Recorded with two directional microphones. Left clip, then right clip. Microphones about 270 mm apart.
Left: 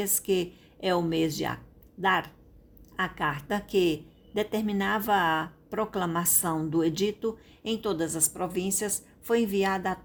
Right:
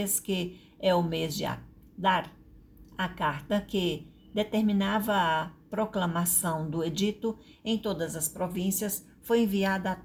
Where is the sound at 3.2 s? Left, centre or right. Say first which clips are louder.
Even; left.